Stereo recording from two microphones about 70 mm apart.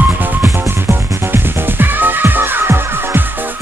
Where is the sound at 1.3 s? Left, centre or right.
Right.